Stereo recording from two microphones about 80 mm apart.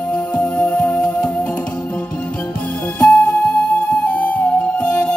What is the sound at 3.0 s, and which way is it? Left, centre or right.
Music, centre.